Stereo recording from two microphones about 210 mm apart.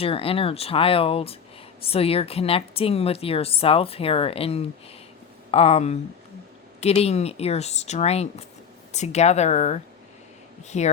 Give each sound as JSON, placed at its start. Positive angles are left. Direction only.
{"t": 0.0, "sound": "speech", "side_deg": 25}